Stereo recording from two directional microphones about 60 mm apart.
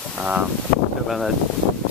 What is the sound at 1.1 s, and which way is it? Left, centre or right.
Speech, centre.